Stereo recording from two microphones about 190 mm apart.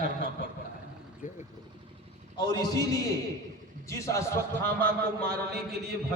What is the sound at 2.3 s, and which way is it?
A man's voice, 25° left (ahead or behind).